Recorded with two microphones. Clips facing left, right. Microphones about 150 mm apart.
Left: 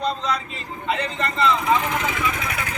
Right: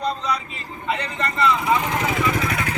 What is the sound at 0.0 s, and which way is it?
Vehicle, centre (ahead or behind).